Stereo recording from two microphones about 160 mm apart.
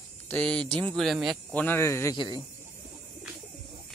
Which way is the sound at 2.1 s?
25° left (ahead or behind).